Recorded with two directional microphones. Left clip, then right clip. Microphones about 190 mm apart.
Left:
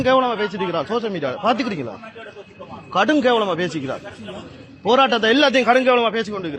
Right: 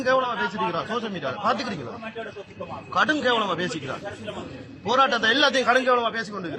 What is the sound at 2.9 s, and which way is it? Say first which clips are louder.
A man's voice: left 5 dB; 35° left (ahead or behind).